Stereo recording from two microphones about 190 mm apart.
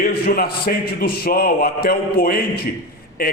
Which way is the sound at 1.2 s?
50° left (ahead or behind).